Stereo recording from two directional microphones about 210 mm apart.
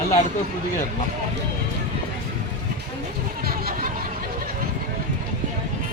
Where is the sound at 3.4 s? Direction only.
45° right (ahead or behind).